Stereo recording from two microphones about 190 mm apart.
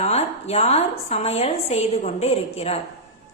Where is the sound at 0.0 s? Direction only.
35° left (ahead or behind).